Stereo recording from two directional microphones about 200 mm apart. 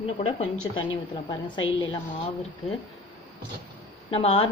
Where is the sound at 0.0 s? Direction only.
30° left (ahead or behind).